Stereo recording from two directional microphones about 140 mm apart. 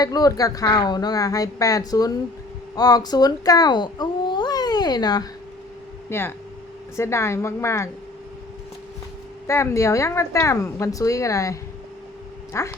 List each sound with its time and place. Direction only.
0.0 s a woman's voice: 25° left (ahead or behind)
6.1 s a woman's voice: 15° left (ahead or behind)
9.5 s a woman's voice: 20° left (ahead or behind)
12.5 s a woman's voice: 20° left (ahead or behind)